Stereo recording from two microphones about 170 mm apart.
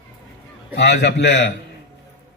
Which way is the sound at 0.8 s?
90° left.